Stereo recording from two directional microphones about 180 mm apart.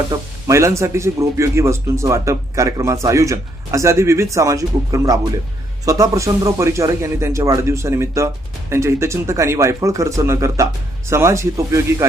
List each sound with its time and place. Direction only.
0.1 s speech: 15° right (ahead or behind)